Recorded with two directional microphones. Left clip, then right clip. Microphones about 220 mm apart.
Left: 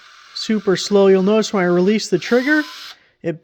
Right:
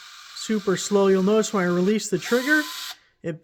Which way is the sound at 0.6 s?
25° left (ahead or behind).